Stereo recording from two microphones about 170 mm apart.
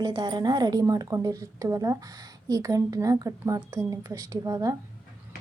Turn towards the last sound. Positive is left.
turn(degrees=-20)  # may be behind; listen again after turning